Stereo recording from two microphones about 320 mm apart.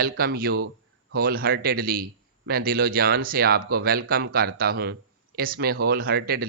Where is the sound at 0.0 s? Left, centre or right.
Right.